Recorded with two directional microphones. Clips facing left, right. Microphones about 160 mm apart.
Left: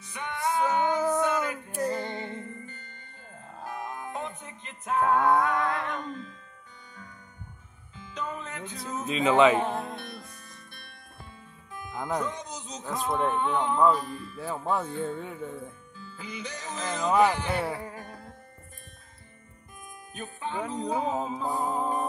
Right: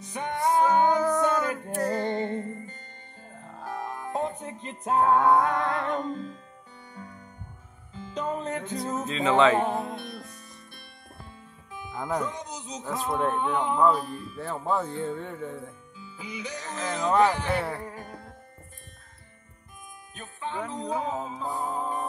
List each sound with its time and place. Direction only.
0.0 s music: 40° right (ahead or behind)
3.6 s music: 15° left (ahead or behind)
4.1 s music: 35° right (ahead or behind)
7.9 s music: 35° right (ahead or behind)
9.0 s music: 15° left (ahead or behind)
9.6 s music: 10° right (ahead or behind)
11.7 s speech: 5° right (ahead or behind)
14.4 s speech: 5° left (ahead or behind)
16.0 s music: 10° right (ahead or behind); by 18.1 s 10° left (ahead or behind)
20.2 s music: 15° left (ahead or behind)